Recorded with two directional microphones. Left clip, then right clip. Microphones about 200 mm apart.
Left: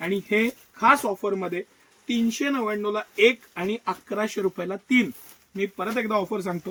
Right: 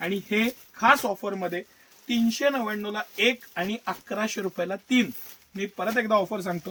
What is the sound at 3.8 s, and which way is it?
Speech, 30° right (ahead or behind).